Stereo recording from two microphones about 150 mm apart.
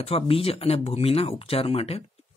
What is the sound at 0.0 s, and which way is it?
Speech, 40° left (ahead or behind).